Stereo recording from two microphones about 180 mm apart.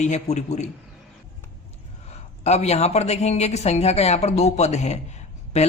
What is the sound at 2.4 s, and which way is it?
A man's voice, 35° left (ahead or behind).